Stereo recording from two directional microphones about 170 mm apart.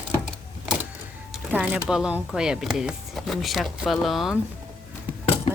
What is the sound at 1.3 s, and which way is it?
Speech, 10° right (ahead or behind).